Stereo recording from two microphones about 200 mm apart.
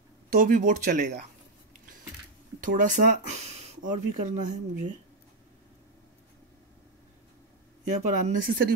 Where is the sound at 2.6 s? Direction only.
40° right (ahead or behind).